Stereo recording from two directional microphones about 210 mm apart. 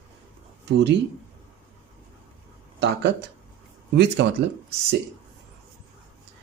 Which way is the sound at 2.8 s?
55° right (ahead or behind).